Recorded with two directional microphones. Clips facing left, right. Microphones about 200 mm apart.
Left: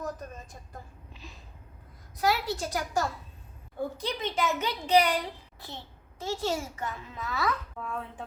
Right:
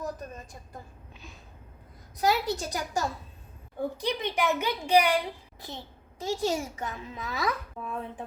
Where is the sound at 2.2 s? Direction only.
15° right (ahead or behind).